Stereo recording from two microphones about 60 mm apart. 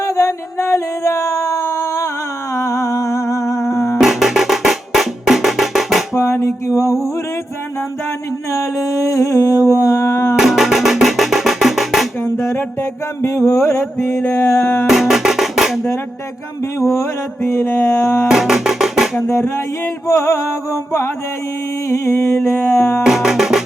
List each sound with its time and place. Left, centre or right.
0.0 s howl: left
2.6 s humming: left
4.0 s music: centre
6.1 s a sound: left
8.5 s a sound: left
10.3 s music: centre
12.4 s a sound: left
13.2 s music: left
14.8 s music: centre
16.8 s music: left
18.3 s music: centre
19.3 s music: left
21.8 s music: left
23.0 s music: centre